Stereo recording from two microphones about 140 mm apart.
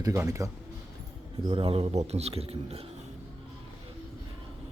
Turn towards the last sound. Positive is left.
turn(degrees=-45)  # may be behind; listen again after turning